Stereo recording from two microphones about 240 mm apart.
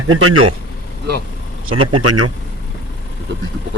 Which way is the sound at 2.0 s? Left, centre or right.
Right.